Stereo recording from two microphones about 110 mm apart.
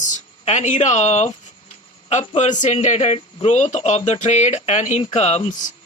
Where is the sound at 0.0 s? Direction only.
90° left.